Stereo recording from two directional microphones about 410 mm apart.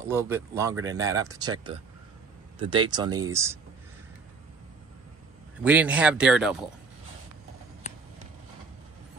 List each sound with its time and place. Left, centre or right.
0.0 s speech: centre
5.6 s speech: centre